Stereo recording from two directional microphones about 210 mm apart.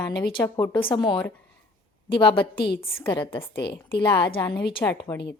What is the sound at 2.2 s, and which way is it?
Speech, 25° left (ahead or behind).